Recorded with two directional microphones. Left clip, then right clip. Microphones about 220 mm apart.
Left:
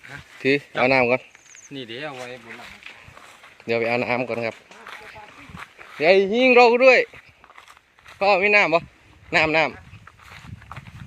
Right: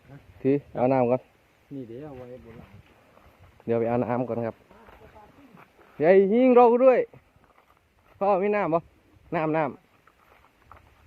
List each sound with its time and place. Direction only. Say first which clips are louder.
0.8 s speech: left 5 dB; 5° right (ahead or behind)
3.7 s speech: left 3 dB; 5° right (ahead or behind)
6.1 s speech: left 3 dB; 15° right (ahead or behind)
6.7 s speech: left 4 dB; centre (ahead or behind)
8.2 s speech: left 7 dB; 5° right (ahead or behind)